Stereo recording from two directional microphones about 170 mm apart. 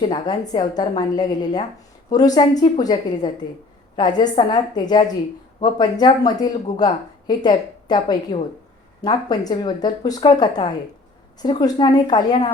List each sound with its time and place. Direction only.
0.0 s a woman's voice: 25° left (ahead or behind)